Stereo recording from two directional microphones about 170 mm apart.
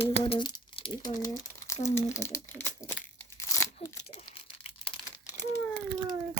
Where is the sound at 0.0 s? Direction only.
30° left (ahead or behind).